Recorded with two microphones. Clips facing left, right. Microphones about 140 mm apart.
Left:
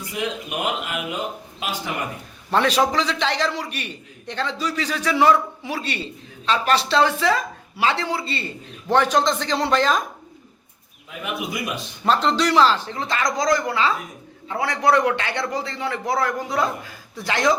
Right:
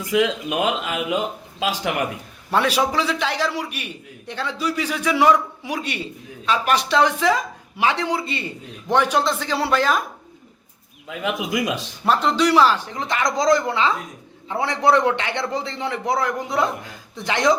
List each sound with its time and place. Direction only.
0.1 s speech: 90° right
2.5 s a man's voice: 10° right (ahead or behind)
11.2 s speech: 90° right
12.0 s a man's voice: 10° right (ahead or behind)